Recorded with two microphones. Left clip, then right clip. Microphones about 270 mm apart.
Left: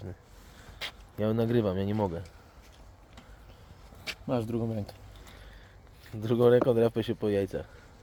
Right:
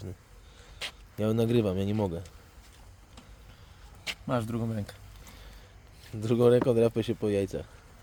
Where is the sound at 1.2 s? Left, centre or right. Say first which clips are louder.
Right 1 dB; centre.